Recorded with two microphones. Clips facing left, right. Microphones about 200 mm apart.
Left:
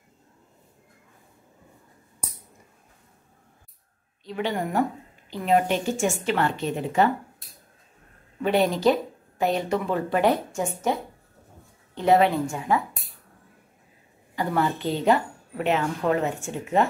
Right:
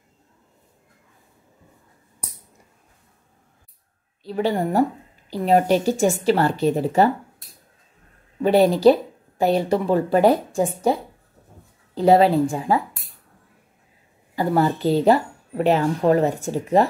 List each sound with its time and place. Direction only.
4.2 s a woman's voice: 35° right (ahead or behind)
8.4 s speech: 35° right (ahead or behind)
14.3 s speech: 35° right (ahead or behind)